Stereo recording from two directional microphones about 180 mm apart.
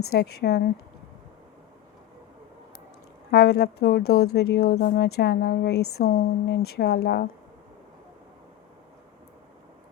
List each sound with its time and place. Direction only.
0.1 s speech: 60° left (ahead or behind)
3.3 s speech: 65° left (ahead or behind)